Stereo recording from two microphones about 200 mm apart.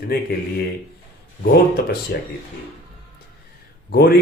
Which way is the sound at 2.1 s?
45° left (ahead or behind).